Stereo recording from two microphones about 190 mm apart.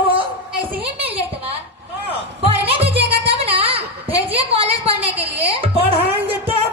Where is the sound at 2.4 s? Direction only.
30° right (ahead or behind).